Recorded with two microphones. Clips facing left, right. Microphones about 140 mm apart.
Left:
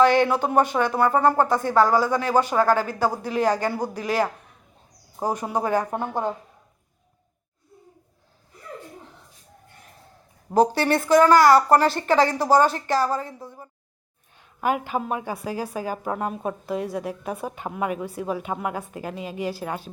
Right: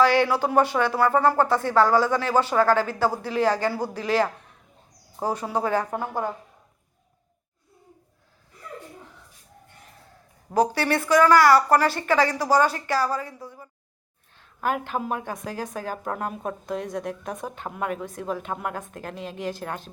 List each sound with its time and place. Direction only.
0.0 s a woman's voice: 20° left (ahead or behind)
10.5 s a woman's voice: 25° left (ahead or behind)
14.3 s a woman's voice: 10° left (ahead or behind)